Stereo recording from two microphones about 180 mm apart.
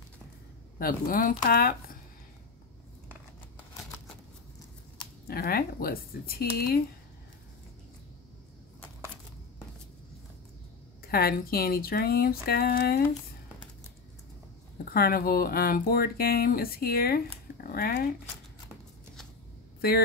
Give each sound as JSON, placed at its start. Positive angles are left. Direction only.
{"t": 0.7, "sound": "speech", "side_deg": 55}
{"t": 5.2, "sound": "speech", "side_deg": 55}
{"t": 11.1, "sound": "speech", "side_deg": 55}
{"t": 14.9, "sound": "speech", "side_deg": 55}